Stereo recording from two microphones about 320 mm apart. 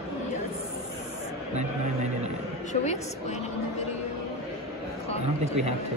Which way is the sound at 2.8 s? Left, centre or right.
Left.